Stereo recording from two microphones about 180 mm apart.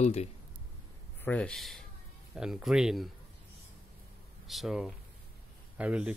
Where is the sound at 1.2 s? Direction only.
5° left (ahead or behind).